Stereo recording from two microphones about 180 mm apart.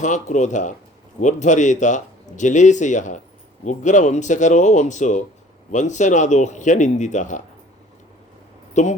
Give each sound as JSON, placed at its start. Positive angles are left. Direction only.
{"t": 0.0, "sound": "speech", "side_deg": 45}
{"t": 8.7, "sound": "speech", "side_deg": 40}